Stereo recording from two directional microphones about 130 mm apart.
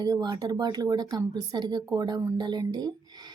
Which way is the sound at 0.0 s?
30° right (ahead or behind).